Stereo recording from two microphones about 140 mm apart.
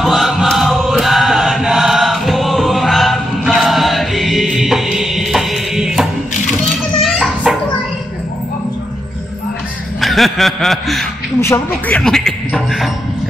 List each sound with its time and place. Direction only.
0.0 s chant: centre (ahead or behind)
7.5 s a sound: centre (ahead or behind)
9.9 s speech: centre (ahead or behind)
11.4 s speech: 15° left (ahead or behind)
12.0 s music: 5° left (ahead or behind)